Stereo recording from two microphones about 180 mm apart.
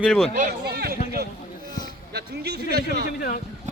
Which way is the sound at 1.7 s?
20° left (ahead or behind).